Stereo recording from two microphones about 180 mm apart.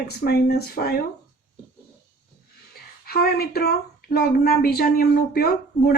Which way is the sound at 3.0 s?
60° left (ahead or behind).